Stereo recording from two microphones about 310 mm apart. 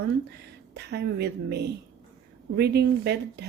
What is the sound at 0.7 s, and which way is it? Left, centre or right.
A woman's voice, right.